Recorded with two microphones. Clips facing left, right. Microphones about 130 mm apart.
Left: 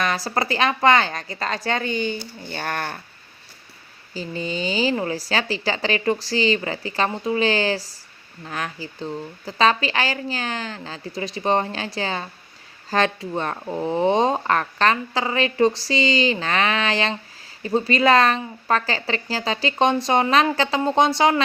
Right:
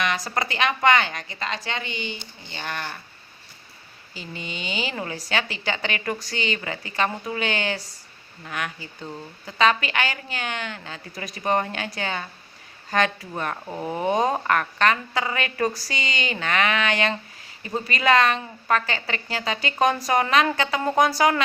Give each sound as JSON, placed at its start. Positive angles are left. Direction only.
{"t": 0.0, "sound": "a woman's voice", "side_deg": 35}
{"t": 4.1, "sound": "a woman's voice", "side_deg": 35}